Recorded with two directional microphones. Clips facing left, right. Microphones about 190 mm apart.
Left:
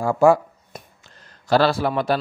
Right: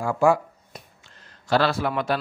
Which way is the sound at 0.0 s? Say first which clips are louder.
Left 4 dB; 35° left (ahead or behind).